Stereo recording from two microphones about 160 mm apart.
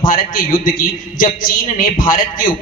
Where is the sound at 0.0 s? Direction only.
60° left (ahead or behind).